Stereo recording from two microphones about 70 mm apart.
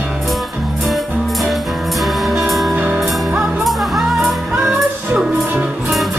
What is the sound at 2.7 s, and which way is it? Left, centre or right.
Music, right.